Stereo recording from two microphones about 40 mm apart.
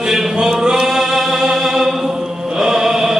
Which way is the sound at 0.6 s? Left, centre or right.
Centre.